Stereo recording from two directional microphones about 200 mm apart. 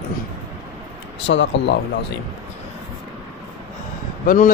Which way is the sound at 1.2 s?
65° left (ahead or behind).